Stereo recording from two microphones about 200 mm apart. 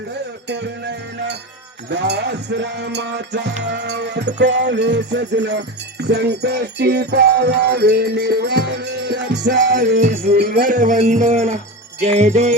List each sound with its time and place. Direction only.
0.4 s music: 60° right (ahead or behind); by 12.5 s 35° right (ahead or behind)